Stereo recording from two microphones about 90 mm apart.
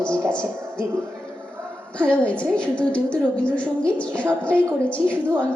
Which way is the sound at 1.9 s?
15° left (ahead or behind).